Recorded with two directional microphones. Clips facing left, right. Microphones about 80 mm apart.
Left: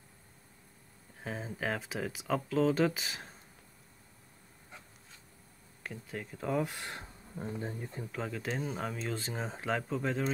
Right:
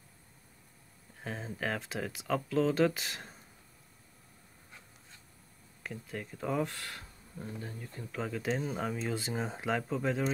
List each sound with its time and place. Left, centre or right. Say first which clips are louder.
1.2 s speech: even; centre
5.9 s speech: right 1 dB; centre
6.7 s speech: left 2 dB; left
8.1 s speech: right 4 dB; centre